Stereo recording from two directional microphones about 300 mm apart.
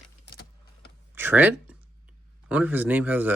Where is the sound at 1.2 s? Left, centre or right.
Centre.